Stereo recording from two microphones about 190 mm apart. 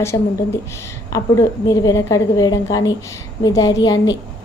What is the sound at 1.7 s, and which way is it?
A woman's voice, 15° left (ahead or behind).